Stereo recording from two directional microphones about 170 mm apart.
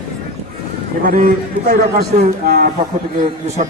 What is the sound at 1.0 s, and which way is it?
A man's voice, 55° right (ahead or behind).